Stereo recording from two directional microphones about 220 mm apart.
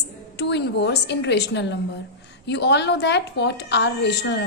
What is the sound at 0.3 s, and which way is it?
A woman's voice, 50° left (ahead or behind).